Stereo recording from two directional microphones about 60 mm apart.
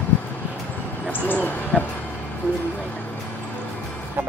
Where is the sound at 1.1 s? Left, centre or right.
Left.